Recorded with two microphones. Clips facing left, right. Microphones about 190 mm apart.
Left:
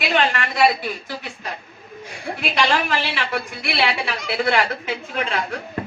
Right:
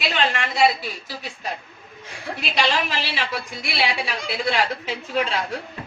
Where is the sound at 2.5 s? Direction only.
55° left (ahead or behind).